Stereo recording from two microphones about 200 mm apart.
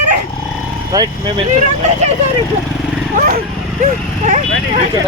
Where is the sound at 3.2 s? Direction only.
45° right (ahead or behind).